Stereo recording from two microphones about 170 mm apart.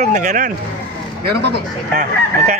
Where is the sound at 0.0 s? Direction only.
45° right (ahead or behind).